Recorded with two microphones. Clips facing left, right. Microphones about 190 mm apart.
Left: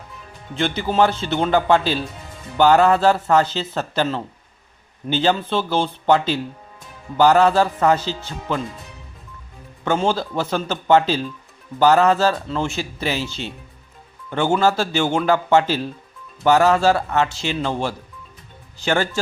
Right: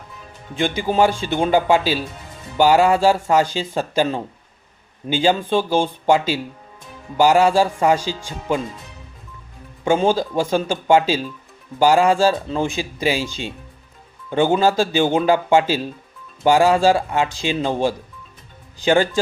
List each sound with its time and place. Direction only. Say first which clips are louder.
0.5 s speech: right 1 dB; 15° right (ahead or behind)
9.8 s speech: right 3 dB; 15° right (ahead or behind)